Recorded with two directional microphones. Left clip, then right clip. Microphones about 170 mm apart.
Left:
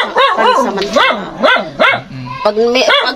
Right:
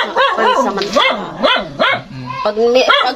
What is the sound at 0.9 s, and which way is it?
Dog, 35° left (ahead or behind).